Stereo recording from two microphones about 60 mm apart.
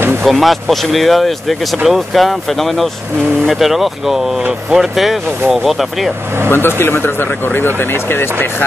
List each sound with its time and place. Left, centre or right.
0.2 s speech: centre
6.5 s speech: left